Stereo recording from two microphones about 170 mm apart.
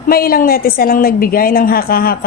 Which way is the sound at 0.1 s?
60° left (ahead or behind).